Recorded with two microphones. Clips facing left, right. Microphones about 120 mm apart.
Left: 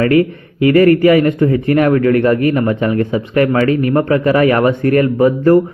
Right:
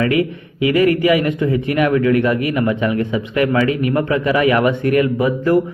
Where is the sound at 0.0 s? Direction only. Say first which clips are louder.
Left 5 dB; 45° left (ahead or behind).